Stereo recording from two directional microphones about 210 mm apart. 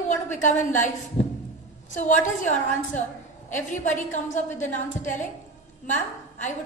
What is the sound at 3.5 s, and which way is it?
A woman's voice, 35° left (ahead or behind).